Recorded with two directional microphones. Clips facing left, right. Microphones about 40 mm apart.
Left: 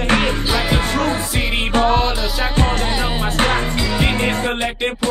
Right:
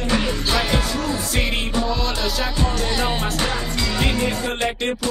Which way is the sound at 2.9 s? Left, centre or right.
Centre.